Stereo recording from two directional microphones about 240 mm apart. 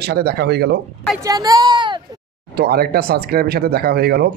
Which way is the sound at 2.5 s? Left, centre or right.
Right.